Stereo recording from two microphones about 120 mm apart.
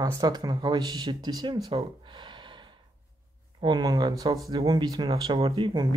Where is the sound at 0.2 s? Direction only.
35° right (ahead or behind).